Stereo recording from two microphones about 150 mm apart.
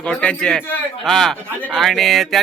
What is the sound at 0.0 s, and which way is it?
Speech, 10° left (ahead or behind).